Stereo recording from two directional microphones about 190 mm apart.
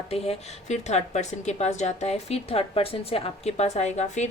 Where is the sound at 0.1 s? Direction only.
35° left (ahead or behind).